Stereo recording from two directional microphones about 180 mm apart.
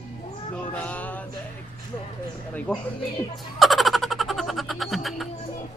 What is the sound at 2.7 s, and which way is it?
Speech, 10° left (ahead or behind).